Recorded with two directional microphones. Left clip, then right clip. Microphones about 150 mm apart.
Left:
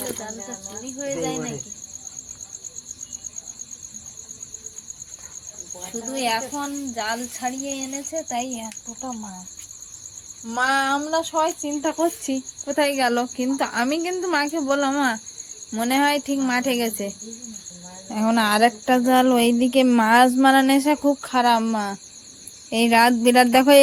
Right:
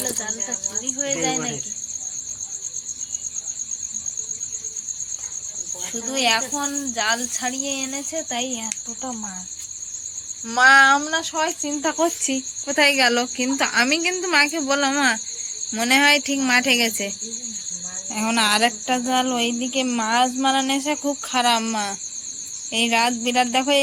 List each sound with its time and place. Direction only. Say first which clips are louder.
0.8 s speech: right 2 dB; 5° left (ahead or behind)
5.8 s speech: right 4 dB; 5° left (ahead or behind)
10.5 s a sound: right 8 dB; 10° left (ahead or behind)
11.3 s speech: left 1 dB; 20° left (ahead or behind)
18.1 s cricket: even; 45° left (ahead or behind)
22.7 s speech: left 3 dB; 70° left (ahead or behind); by 23.8 s 90° left